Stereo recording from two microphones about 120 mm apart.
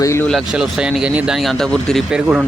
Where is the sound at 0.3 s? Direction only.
Centre (ahead or behind).